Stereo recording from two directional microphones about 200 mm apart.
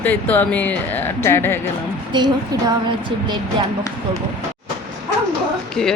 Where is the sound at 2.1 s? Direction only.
20° right (ahead or behind).